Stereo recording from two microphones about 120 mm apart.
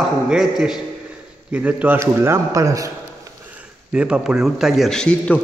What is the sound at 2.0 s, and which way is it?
Speech, 25° right (ahead or behind).